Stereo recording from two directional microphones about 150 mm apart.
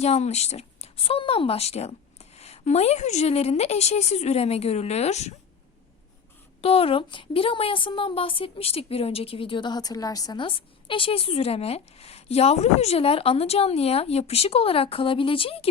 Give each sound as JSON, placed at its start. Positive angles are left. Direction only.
{"t": 0.0, "sound": "speech", "side_deg": 45}
{"t": 6.6, "sound": "a woman's voice", "side_deg": 40}